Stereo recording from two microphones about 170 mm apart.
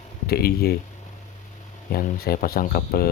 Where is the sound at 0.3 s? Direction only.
70° left (ahead or behind).